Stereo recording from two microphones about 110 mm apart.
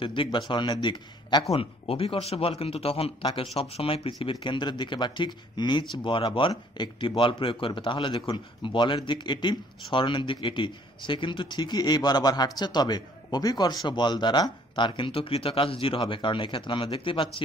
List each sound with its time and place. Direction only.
0.0 s speech: 50° left (ahead or behind)
1.5 s a man's voice: 60° left (ahead or behind)